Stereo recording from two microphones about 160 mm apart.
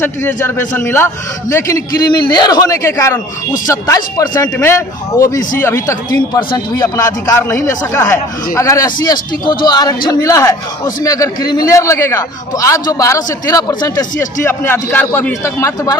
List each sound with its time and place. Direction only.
0.0 s a man's voice: 15° left (ahead or behind)